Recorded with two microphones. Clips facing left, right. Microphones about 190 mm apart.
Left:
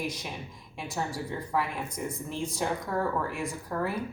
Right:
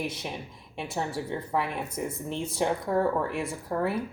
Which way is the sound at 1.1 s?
25° right (ahead or behind).